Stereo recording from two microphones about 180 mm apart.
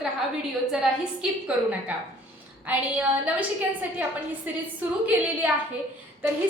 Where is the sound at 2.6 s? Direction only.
10° right (ahead or behind).